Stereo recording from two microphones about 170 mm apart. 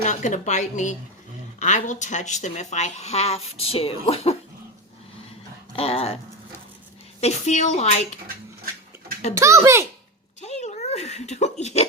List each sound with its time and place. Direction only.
0.0 s speech: 45° left (ahead or behind)
5.7 s dog: 35° left (ahead or behind)
7.2 s speech: 40° left (ahead or behind)
9.3 s a child's voice: 15° right (ahead or behind)
10.4 s a sound: 40° left (ahead or behind)